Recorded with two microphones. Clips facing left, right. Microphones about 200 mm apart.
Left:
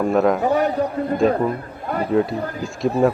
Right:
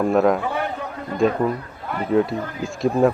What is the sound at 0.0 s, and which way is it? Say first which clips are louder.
Speech: even; centre (ahead or behind).